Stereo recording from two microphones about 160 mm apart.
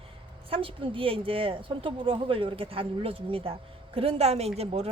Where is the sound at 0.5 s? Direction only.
35° right (ahead or behind).